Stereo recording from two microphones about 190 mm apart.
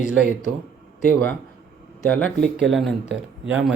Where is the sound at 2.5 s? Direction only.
Centre (ahead or behind).